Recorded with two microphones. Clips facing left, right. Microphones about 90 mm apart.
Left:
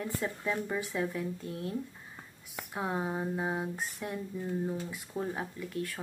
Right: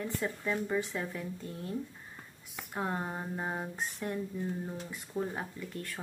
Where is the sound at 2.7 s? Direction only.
5° left (ahead or behind).